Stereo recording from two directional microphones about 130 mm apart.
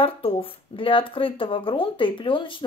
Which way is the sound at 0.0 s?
45° left (ahead or behind).